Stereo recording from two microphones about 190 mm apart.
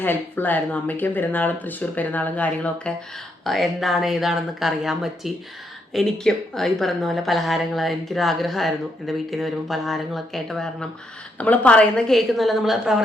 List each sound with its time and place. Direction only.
0.0 s speech: 10° left (ahead or behind)